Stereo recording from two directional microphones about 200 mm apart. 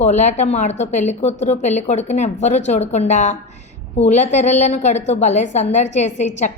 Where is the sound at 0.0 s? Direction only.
35° left (ahead or behind).